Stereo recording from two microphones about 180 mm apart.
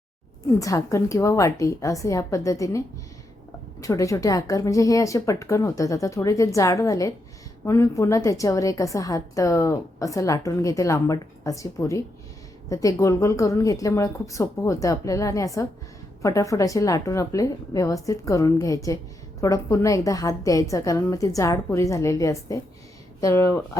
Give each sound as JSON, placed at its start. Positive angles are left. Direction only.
{"t": 0.6, "sound": "a woman's voice", "side_deg": 20}